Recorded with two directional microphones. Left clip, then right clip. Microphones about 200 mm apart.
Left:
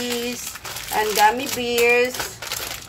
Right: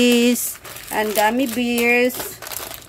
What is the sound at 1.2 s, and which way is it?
Speech, 60° right (ahead or behind).